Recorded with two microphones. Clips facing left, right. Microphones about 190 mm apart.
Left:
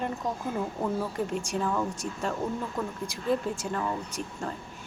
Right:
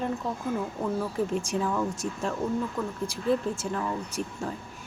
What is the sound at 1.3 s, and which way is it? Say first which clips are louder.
Speech: right 1 dB; 5° right (ahead or behind).